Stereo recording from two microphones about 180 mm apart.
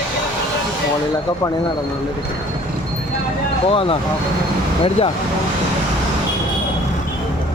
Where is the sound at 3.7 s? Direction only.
30° left (ahead or behind).